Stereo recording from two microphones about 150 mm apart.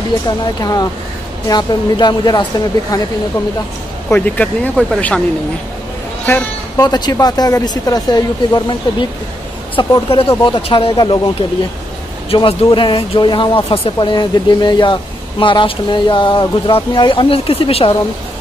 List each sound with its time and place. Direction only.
0.6 s speech: 25° left (ahead or behind)
4.1 s speech: 10° left (ahead or behind)
6.8 s speech: 25° left (ahead or behind)